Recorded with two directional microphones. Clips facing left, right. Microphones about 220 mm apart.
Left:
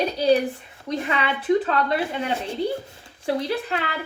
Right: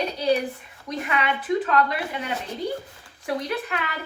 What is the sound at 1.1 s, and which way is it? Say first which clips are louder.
A woman's voice: left 3 dB; 30° left (ahead or behind).